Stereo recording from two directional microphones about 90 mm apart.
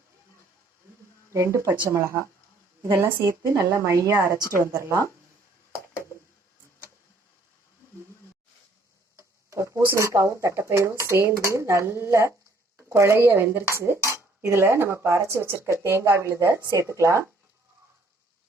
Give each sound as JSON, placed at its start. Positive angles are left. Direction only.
{"t": 1.3, "sound": "speech", "side_deg": -35}
{"t": 9.1, "sound": "tick-tock", "side_deg": -35}
{"t": 9.8, "sound": "speech", "side_deg": -30}